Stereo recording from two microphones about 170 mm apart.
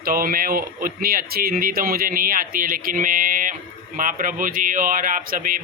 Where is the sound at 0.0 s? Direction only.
60° right (ahead or behind).